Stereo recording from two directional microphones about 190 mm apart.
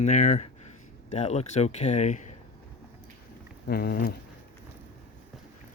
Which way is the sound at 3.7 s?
50° left (ahead or behind).